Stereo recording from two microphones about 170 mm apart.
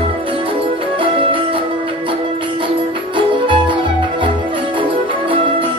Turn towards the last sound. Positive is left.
turn(degrees=-30)  # may be behind; listen again after turning